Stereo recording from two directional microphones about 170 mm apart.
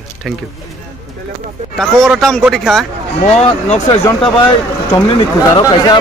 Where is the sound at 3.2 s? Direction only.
40° left (ahead or behind).